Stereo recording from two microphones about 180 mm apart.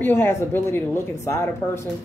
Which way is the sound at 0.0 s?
10° left (ahead or behind).